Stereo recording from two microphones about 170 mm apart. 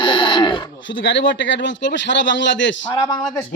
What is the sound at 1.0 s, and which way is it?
A man's voice, 90° left.